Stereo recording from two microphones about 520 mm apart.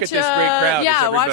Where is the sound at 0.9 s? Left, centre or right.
Left.